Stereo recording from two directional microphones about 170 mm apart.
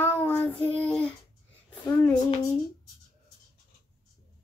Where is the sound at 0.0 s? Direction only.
15° left (ahead or behind).